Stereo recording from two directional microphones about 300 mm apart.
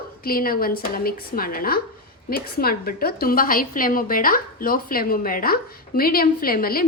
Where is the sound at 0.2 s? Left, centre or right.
Left.